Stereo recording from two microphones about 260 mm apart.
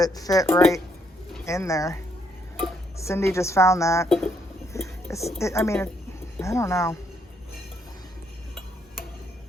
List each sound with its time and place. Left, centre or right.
0.0 s speech: centre
3.0 s speech: centre